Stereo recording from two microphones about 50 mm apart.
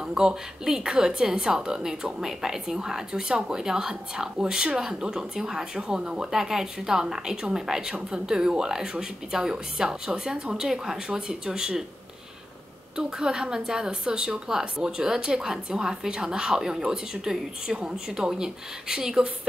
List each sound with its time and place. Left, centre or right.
0.0 s a woman's voice: centre
12.9 s a woman's voice: centre